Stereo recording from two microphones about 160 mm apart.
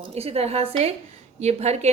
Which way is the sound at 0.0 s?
40° right (ahead or behind).